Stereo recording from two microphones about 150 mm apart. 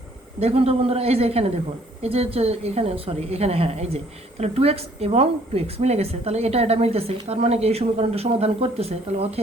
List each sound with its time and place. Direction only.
0.3 s a woman's voice: 40° right (ahead or behind)